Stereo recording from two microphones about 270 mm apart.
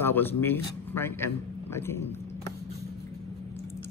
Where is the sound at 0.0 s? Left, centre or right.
Centre.